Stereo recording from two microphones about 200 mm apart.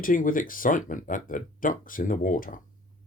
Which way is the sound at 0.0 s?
45° left (ahead or behind).